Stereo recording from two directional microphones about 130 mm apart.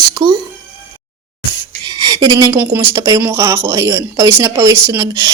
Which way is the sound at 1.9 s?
30° right (ahead or behind).